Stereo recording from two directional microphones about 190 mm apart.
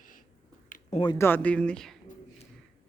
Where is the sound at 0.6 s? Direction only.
45° left (ahead or behind).